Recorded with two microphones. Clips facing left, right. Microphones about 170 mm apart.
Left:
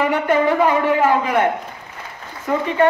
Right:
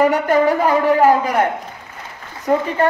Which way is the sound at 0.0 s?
40° right (ahead or behind).